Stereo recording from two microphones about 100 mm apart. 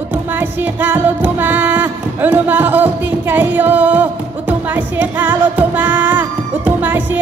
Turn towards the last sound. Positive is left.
turn(degrees=-15)  # may be behind; listen again after turning